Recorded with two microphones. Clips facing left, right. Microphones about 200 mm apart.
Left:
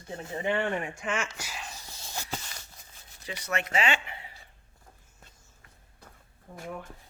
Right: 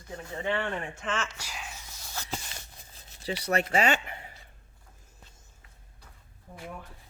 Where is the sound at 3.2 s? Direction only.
35° right (ahead or behind).